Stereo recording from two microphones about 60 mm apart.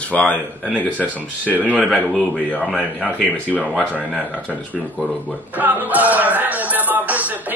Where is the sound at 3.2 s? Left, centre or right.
Left.